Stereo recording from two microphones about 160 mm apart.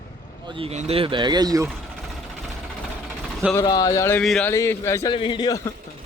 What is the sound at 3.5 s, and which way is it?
Speech, 25° left (ahead or behind).